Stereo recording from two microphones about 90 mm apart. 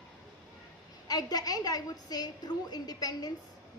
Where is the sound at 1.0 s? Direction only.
45° left (ahead or behind).